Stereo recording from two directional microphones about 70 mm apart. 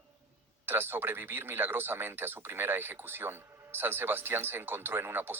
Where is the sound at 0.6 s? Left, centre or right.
Right.